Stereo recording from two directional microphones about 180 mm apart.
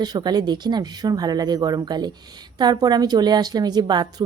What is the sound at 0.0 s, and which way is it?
A woman's voice, 25° right (ahead or behind).